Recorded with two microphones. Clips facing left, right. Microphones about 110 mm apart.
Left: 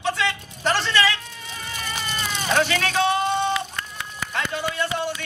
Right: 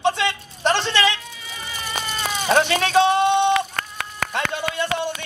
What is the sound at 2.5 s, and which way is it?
A man's voice, 30° right (ahead or behind).